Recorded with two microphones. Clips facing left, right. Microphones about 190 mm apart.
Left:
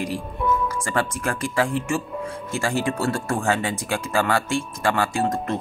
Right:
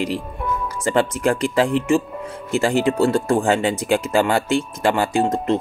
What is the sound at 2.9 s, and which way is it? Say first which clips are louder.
Speech: right 7 dB; 20° right (ahead or behind).